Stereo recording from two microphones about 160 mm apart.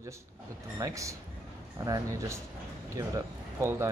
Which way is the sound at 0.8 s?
20° right (ahead or behind).